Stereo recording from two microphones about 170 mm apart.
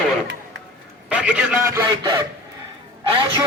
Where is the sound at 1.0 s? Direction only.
5° right (ahead or behind).